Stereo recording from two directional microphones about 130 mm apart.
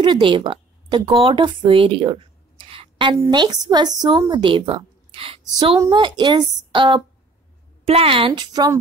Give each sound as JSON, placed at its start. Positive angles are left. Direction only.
{"t": 0.0, "sound": "speech", "side_deg": -40}
{"t": 3.2, "sound": "a woman's voice", "side_deg": -30}
{"t": 7.8, "sound": "speech", "side_deg": -45}